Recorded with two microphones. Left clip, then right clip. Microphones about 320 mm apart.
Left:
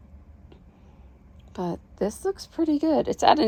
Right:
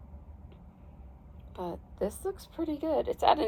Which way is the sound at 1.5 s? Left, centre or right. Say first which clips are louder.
Left 6 dB; left.